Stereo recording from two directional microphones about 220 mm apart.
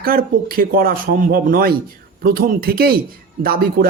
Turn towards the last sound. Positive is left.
turn(degrees=-45)  # may be behind; listen again after turning